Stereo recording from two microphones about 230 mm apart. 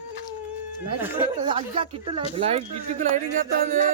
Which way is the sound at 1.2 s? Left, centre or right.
Right.